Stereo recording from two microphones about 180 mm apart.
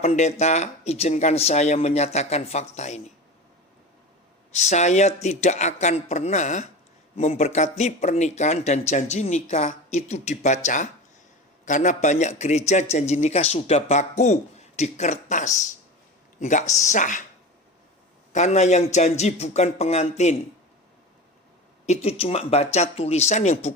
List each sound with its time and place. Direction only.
0.0 s a man's voice: 35° left (ahead or behind)
4.5 s a man's voice: 40° left (ahead or behind)
18.3 s a man's voice: 40° left (ahead or behind)
21.8 s a man's voice: 35° left (ahead or behind)